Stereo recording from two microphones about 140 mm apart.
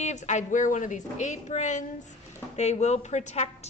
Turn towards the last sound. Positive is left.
turn(degrees=55)  # may be behind; listen again after turning